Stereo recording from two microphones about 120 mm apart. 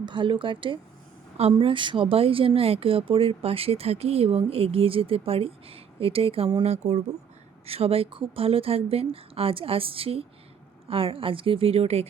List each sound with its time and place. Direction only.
0.0 s speech: 45° right (ahead or behind)
6.6 s speech: 65° right (ahead or behind)